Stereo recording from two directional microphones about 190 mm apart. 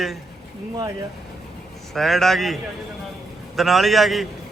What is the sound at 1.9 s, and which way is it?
A man's voice, centre (ahead or behind).